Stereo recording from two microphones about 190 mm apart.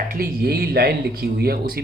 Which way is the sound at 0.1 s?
55° right (ahead or behind).